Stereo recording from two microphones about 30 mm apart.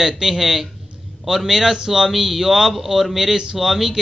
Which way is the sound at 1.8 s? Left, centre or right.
Right.